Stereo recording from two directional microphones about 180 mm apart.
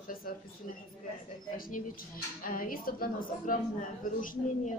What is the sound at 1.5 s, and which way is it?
A man's voice, 50° left (ahead or behind).